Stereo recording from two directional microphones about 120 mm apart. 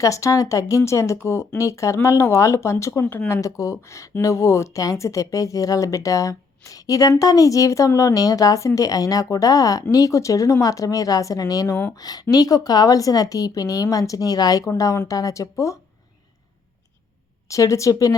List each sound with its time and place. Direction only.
0.0 s a woman's voice: 25° left (ahead or behind)
17.5 s speech: 25° left (ahead or behind)